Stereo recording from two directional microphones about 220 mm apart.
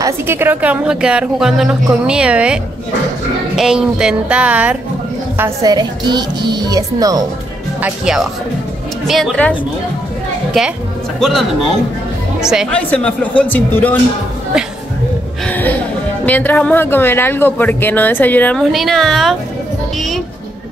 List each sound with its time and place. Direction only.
0.0 s a woman's voice: 10° right (ahead or behind)
5.4 s speech: 15° right (ahead or behind)
7.8 s a woman's voice: centre (ahead or behind)
11.1 s a woman's voice: centre (ahead or behind)
15.4 s music: 10° left (ahead or behind)
16.3 s speech: 5° left (ahead or behind)